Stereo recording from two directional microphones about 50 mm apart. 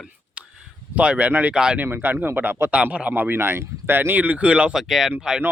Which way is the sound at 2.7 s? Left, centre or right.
Right.